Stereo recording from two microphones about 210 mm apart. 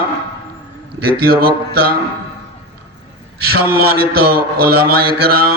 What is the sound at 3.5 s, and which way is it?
A man's voice, 45° right (ahead or behind).